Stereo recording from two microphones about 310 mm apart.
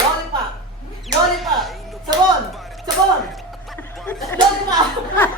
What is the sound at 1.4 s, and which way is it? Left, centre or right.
Music, centre.